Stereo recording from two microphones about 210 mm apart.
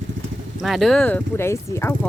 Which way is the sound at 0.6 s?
Centre (ahead or behind).